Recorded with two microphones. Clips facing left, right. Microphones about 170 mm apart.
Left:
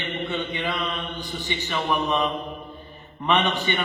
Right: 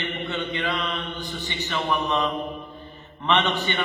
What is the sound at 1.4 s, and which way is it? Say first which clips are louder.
A man's voice: left 1 dB; 15° left (ahead or behind).